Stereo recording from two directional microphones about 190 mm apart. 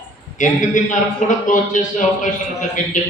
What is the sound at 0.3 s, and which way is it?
A man's voice, 40° left (ahead or behind).